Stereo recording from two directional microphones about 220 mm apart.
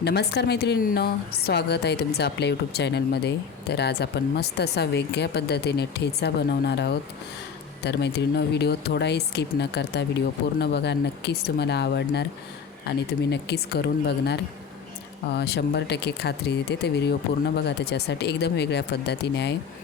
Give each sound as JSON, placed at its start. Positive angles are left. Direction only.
{"t": 0.0, "sound": "a woman's voice", "side_deg": 50}
{"t": 13.3, "sound": "a woman's voice", "side_deg": 50}
{"t": 15.4, "sound": "a woman's voice", "side_deg": 50}